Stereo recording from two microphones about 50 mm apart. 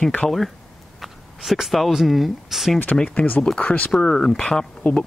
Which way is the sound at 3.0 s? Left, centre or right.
Left.